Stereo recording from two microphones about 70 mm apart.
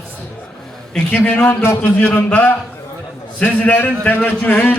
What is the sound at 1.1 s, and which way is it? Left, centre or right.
A man's voice, left.